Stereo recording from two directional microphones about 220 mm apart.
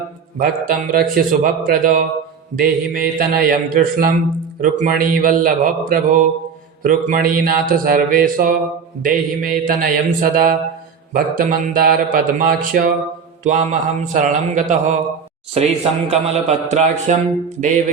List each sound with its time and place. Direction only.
0.3 s a man's voice: 40° right (ahead or behind)